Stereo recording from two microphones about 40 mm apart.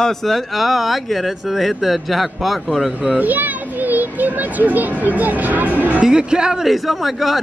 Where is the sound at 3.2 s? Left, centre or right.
Right.